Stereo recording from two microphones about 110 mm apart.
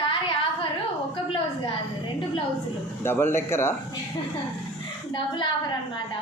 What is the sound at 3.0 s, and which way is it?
Speech, 20° left (ahead or behind).